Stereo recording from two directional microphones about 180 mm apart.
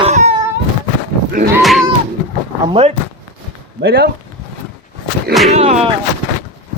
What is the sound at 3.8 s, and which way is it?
Speech, 60° right (ahead or behind).